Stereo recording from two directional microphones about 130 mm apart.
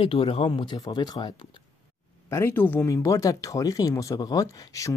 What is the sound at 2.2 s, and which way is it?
Speech, 20° left (ahead or behind).